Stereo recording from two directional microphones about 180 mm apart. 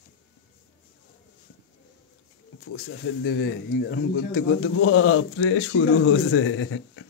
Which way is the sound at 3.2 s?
85° left.